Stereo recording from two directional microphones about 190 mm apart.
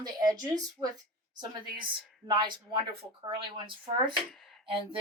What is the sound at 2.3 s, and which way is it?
A woman's voice, 25° right (ahead or behind).